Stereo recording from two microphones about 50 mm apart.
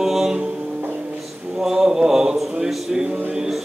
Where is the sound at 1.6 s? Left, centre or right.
Centre.